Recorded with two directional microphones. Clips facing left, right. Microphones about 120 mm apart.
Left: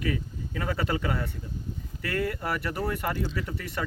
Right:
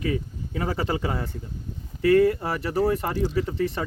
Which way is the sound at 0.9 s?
25° right (ahead or behind).